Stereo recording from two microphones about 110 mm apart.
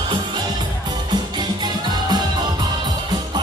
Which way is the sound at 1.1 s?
40° right (ahead or behind).